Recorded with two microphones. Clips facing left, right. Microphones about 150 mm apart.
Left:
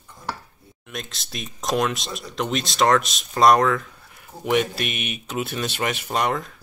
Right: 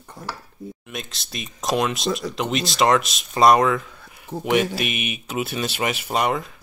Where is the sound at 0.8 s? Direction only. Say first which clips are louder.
Right 1 dB; centre (ahead or behind).